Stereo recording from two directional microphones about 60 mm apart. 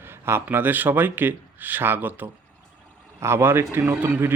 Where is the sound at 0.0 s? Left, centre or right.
Right.